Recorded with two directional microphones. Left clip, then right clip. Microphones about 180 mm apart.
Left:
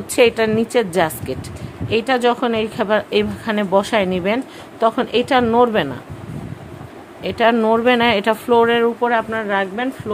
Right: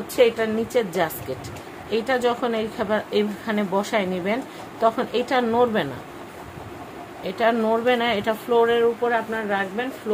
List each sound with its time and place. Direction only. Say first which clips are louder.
0.1 s a woman's voice: left 5 dB; 55° left (ahead or behind); by 5.9 s 35° left (ahead or behind)
7.2 s speech: left 6 dB; 45° left (ahead or behind); by 10.2 s 70° left (ahead or behind)